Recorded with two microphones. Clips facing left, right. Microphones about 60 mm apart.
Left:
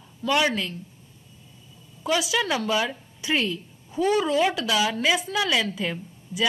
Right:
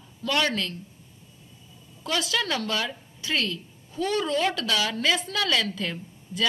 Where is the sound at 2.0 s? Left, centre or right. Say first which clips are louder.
Left 3 dB; centre.